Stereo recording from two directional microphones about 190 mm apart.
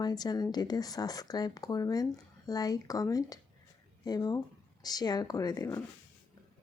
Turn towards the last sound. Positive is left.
turn(degrees=20)  # may be behind; listen again after turning